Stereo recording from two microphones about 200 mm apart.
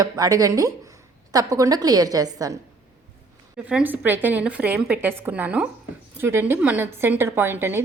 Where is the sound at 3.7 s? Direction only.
5° right (ahead or behind).